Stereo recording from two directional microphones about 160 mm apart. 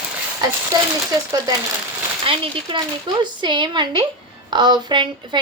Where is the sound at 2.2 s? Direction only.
35° right (ahead or behind).